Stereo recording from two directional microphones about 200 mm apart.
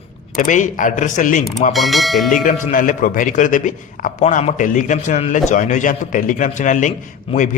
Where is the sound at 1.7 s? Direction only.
Centre (ahead or behind).